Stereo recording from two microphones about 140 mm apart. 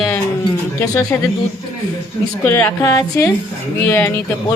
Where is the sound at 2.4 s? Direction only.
20° left (ahead or behind).